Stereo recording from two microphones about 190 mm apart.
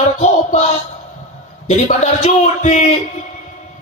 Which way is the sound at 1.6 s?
35° left (ahead or behind).